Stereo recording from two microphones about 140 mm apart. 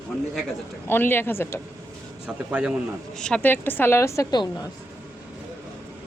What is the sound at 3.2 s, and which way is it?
A woman's voice, 5° left (ahead or behind).